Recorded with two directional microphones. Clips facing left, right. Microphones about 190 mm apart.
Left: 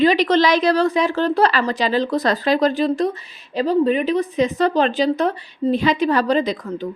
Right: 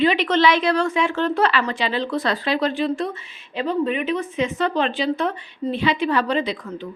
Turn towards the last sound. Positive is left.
turn(degrees=40)  # may be behind; listen again after turning